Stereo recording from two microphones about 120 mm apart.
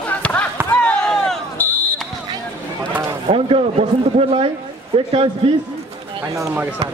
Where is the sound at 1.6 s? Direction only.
15° left (ahead or behind).